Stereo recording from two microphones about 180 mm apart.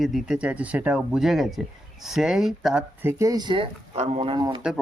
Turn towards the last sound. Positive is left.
turn(degrees=-25)  # may be behind; listen again after turning